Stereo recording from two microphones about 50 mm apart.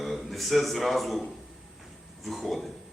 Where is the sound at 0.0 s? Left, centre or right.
Centre.